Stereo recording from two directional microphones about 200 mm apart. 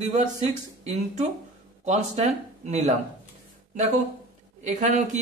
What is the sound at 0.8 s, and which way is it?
Speech, 35° right (ahead or behind).